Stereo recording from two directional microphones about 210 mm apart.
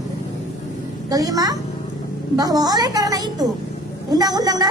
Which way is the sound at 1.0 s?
15° right (ahead or behind).